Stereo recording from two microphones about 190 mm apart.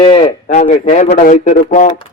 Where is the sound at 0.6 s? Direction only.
40° left (ahead or behind).